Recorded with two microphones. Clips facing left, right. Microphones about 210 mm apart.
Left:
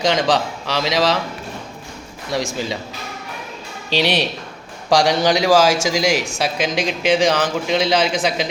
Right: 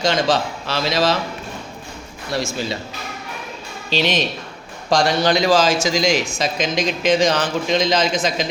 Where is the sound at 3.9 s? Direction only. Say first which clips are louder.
Left 1 dB; 15° left (ahead or behind).